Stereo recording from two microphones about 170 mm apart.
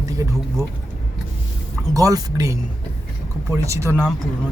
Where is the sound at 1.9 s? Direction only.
20° right (ahead or behind).